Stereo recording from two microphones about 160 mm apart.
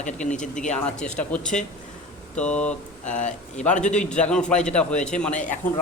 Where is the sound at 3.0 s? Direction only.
50° left (ahead or behind).